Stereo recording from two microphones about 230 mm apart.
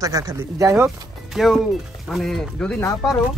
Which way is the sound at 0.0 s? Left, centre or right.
Centre.